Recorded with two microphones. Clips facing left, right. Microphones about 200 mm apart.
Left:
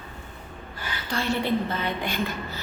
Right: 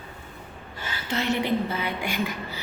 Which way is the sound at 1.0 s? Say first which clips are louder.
Right 1 dB; 20° right (ahead or behind).